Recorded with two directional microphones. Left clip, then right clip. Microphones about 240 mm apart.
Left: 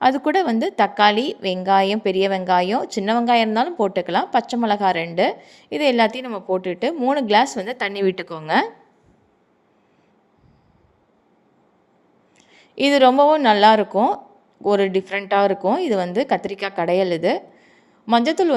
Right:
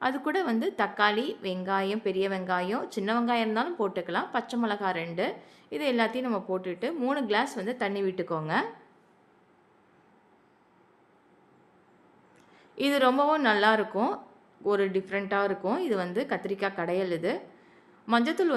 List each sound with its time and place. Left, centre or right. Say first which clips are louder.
0.0 s a woman's voice: left 11 dB; left
12.5 s a woman's voice: left 10 dB; left